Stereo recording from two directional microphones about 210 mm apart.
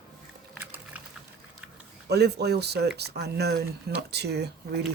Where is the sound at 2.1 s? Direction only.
50° right (ahead or behind).